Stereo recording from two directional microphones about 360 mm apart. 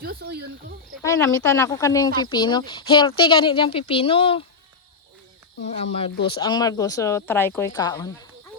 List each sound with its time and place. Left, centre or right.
0.0 s speech: right
1.0 s speech: centre
5.6 s speech: centre